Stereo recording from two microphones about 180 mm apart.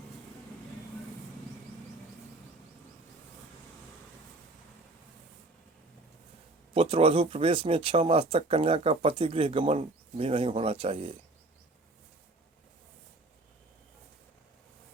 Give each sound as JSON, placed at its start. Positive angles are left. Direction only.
{"t": 6.7, "sound": "speech", "side_deg": -30}